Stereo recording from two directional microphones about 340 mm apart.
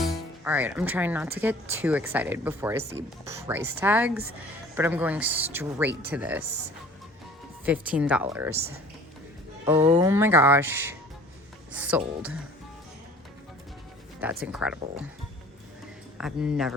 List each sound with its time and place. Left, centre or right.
0.0 s speech: centre
7.6 s speech: centre
9.6 s speech: centre
14.4 s speech: centre
16.1 s speech: centre